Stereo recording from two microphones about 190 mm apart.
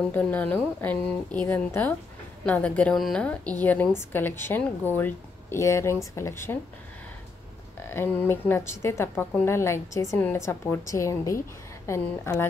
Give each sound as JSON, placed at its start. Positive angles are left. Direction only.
{"t": 0.1, "sound": "a woman's voice", "side_deg": 10}
{"t": 7.9, "sound": "a woman's voice", "side_deg": 10}